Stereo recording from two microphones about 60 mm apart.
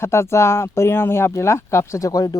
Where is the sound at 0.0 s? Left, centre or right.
Left.